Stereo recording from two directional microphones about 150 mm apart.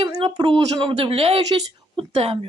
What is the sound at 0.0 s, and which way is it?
A woman's voice, 35° right (ahead or behind).